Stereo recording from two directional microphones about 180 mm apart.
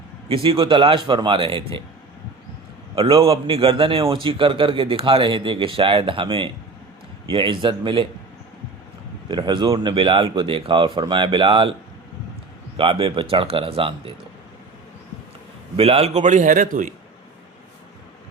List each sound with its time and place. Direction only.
0.4 s a man's voice: 30° right (ahead or behind)
2.9 s a man's voice: 30° right (ahead or behind)
9.3 s a man's voice: 25° right (ahead or behind)
12.7 s speech: 30° right (ahead or behind)
15.7 s speech: 35° right (ahead or behind)